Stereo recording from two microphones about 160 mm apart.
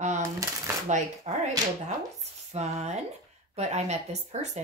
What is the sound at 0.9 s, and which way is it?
Speech, 45° right (ahead or behind).